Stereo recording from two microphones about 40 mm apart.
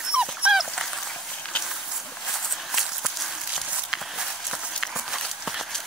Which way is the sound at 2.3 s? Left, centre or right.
Centre.